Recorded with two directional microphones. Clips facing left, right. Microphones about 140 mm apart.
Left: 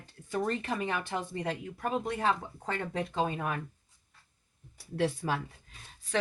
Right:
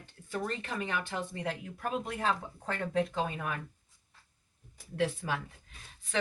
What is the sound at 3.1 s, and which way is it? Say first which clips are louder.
Speech: left 3 dB; 30° left (ahead or behind).